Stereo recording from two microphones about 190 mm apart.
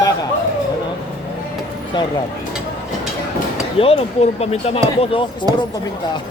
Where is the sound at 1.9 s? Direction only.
25° left (ahead or behind).